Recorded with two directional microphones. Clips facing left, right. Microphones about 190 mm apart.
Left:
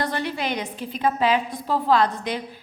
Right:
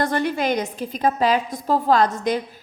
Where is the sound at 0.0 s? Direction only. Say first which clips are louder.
Right 5 dB; 45° right (ahead or behind).